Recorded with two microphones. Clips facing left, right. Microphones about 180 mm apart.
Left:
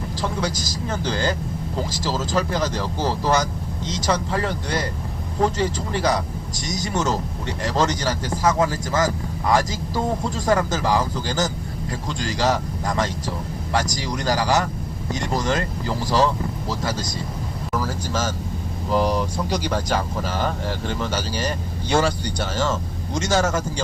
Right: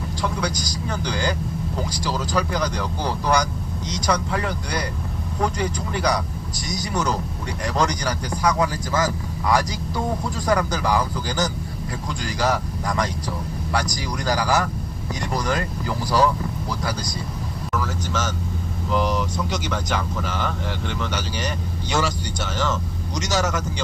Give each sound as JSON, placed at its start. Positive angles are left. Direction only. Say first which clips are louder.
{"t": 0.2, "sound": "speech", "louder": "even", "side_deg": 25}
{"t": 14.1, "sound": "speech", "louder": "left 1 dB", "side_deg": 20}
{"t": 17.7, "sound": "speech", "louder": "left 1 dB", "side_deg": 30}